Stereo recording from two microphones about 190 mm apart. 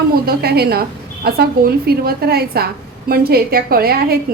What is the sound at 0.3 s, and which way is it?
A woman's voice, 55° right (ahead or behind).